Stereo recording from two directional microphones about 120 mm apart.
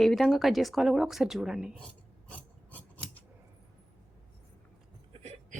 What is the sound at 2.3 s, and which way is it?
Filing, 15° left (ahead or behind).